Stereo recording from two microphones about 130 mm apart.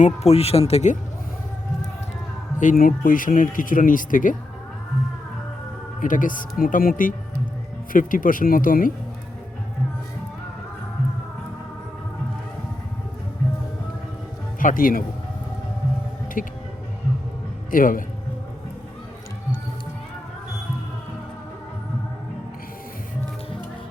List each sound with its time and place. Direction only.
0.0 s speech: 55° left (ahead or behind)
2.6 s speech: 85° left
6.0 s speech: 90° left
14.6 s speech: 90° left
16.4 s speech: 90° left
17.7 s a man's voice: 90° left